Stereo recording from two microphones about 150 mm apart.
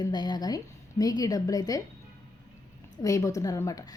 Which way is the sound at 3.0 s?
20° left (ahead or behind).